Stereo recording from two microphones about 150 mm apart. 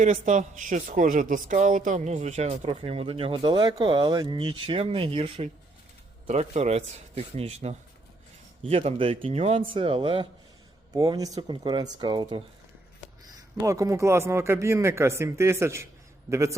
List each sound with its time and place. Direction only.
0.0 s a man's voice: 55° right (ahead or behind); by 5.5 s 35° right (ahead or behind)
6.2 s a man's voice: 45° right (ahead or behind); by 16.6 s 20° right (ahead or behind)